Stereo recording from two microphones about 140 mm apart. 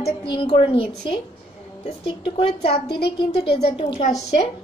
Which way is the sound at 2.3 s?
45° left (ahead or behind).